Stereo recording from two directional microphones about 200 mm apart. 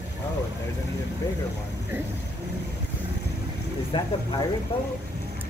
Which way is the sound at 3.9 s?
25° left (ahead or behind).